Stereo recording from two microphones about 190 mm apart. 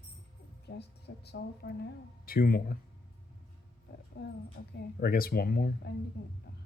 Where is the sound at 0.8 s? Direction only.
60° left (ahead or behind).